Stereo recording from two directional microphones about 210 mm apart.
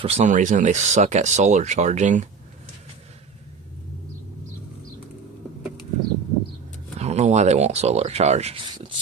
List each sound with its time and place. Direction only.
0.0 s speech: 30° right (ahead or behind)
7.0 s speech: 30° right (ahead or behind)
8.7 s a sound: 20° right (ahead or behind)